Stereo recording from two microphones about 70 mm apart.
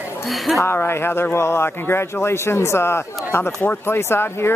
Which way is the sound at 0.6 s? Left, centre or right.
Left.